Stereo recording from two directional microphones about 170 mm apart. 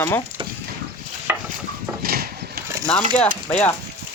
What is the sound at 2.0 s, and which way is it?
Horse, 65° right (ahead or behind).